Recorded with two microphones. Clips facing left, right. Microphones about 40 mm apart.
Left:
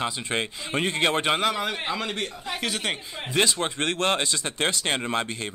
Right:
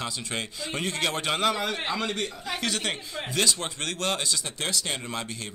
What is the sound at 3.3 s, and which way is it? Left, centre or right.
Speech, left.